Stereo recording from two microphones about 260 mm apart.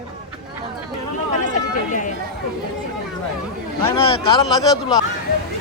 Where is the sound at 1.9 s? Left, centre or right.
Left.